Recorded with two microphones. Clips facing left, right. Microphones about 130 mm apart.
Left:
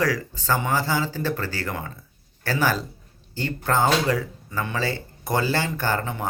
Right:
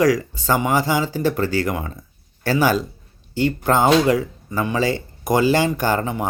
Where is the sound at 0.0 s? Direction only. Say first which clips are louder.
Right 7 dB; 15° right (ahead or behind).